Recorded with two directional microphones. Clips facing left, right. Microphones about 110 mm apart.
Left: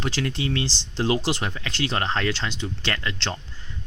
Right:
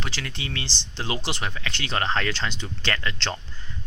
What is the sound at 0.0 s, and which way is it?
Speech, 30° left (ahead or behind).